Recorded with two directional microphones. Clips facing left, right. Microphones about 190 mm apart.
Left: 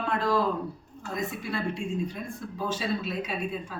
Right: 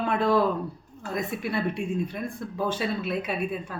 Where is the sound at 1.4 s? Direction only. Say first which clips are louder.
Right 3 dB; 60° right (ahead or behind).